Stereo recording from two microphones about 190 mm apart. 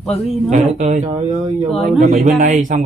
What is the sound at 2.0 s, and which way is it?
Speech, 40° right (ahead or behind).